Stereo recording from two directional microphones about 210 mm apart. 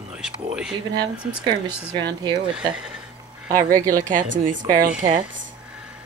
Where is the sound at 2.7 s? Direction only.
5° right (ahead or behind).